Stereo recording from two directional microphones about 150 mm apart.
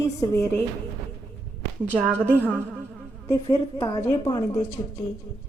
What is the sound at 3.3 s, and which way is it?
A woman's voice, 20° left (ahead or behind).